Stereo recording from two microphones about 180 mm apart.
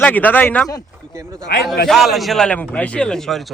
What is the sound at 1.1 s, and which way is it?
Speech, 15° right (ahead or behind).